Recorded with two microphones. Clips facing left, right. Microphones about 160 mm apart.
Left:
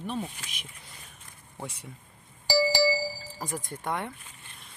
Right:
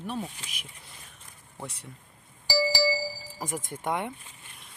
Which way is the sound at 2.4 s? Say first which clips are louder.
Left 2 dB; 55° left (ahead or behind).